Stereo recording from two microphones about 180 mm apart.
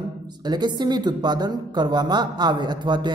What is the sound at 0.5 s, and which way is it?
Speech, 25° right (ahead or behind).